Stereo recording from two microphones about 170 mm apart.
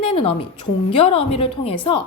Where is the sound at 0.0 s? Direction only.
35° left (ahead or behind).